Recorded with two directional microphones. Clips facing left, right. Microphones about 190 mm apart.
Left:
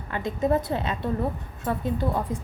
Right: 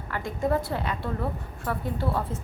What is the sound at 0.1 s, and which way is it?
A woman's voice, 20° left (ahead or behind).